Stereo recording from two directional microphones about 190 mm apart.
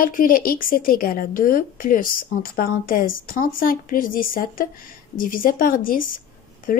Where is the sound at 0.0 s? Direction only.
50° left (ahead or behind).